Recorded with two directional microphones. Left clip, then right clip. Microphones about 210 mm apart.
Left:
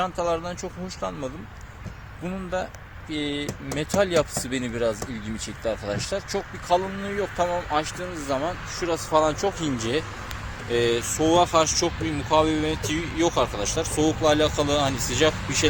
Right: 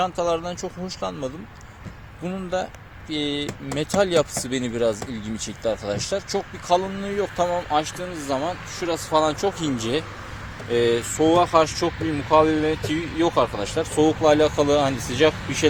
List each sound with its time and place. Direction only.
0.0 s speech: 40° right (ahead or behind)